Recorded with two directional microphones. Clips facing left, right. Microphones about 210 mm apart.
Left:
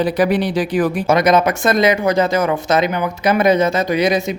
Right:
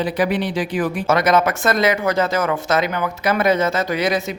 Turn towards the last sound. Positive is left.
turn(degrees=15)  # may be behind; listen again after turning